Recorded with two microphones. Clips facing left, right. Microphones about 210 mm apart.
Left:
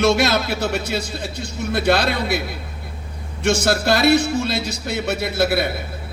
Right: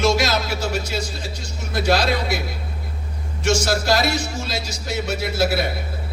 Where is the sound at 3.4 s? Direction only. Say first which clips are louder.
Left 2 dB; 60° left (ahead or behind).